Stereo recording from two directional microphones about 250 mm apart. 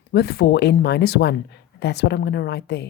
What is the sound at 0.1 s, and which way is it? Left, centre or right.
A woman's voice, left.